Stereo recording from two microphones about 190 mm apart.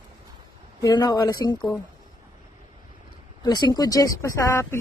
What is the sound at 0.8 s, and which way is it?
Speech, 20° left (ahead or behind).